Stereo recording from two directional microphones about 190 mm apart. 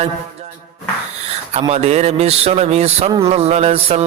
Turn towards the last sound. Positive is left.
turn(degrees=-35)  # may be behind; listen again after turning